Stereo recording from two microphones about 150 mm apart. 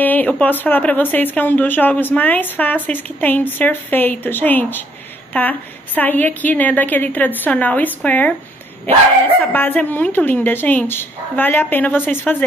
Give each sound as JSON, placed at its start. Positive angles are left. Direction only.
{"t": 0.0, "sound": "speech", "side_deg": 10}
{"t": 9.4, "sound": "speech", "side_deg": 10}